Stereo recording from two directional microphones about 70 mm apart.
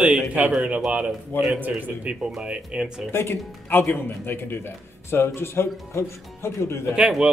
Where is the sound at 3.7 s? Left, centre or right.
Left.